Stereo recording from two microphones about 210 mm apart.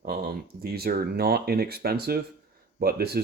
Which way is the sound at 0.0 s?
45° right (ahead or behind).